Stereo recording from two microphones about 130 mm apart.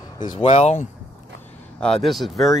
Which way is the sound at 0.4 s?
50° left (ahead or behind).